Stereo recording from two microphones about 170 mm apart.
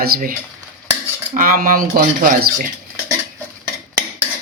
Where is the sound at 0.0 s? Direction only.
60° right (ahead or behind).